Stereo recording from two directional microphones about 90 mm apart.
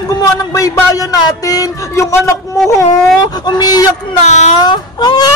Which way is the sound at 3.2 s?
50° left (ahead or behind).